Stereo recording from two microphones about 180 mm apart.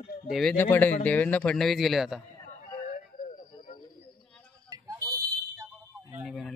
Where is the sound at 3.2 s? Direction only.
50° left (ahead or behind).